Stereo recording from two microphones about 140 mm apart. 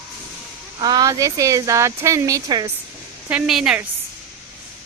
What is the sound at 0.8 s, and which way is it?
Speech, 30° right (ahead or behind).